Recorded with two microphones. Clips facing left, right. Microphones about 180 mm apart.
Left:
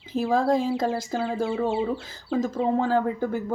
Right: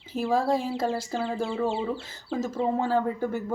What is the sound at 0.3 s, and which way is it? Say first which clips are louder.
Speech: left 3 dB; 5° right (ahead or behind).